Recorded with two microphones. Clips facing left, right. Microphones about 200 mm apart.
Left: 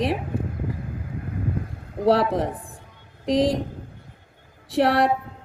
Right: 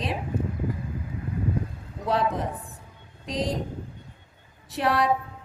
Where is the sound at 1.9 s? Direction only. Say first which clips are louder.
Left 7 dB; 70° left (ahead or behind).